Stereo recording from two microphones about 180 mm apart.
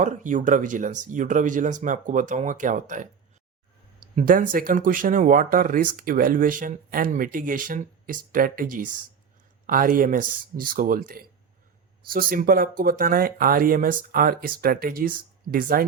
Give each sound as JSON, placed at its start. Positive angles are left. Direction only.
{"t": 0.0, "sound": "speech", "side_deg": -45}
{"t": 4.1, "sound": "speech", "side_deg": -45}